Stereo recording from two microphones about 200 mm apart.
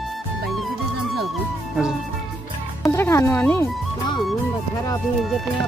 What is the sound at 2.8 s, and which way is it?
Speech, 15° left (ahead or behind).